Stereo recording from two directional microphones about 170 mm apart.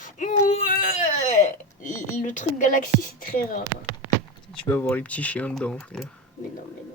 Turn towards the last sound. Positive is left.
turn(degrees=5)  # may be behind; listen again after turning